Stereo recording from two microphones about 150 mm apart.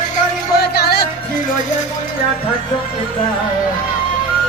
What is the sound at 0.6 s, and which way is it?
Music, 90° left.